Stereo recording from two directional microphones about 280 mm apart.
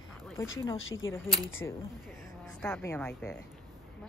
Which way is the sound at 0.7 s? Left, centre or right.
Left.